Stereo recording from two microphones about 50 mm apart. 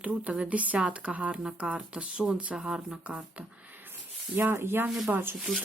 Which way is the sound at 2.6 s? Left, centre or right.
Centre.